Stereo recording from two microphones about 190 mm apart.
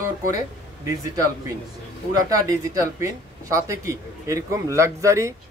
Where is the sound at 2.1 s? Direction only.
20° right (ahead or behind).